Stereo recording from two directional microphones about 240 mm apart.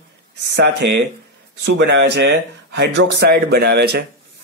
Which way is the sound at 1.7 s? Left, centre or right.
Right.